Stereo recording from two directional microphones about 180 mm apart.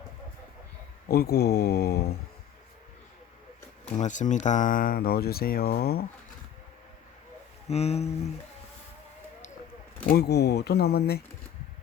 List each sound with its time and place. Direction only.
1.0 s speech: 60° left (ahead or behind)
3.9 s speech: 40° left (ahead or behind); by 6.1 s 60° left (ahead or behind)
7.7 s speech: 35° left (ahead or behind)
10.1 s speech: 65° left (ahead or behind)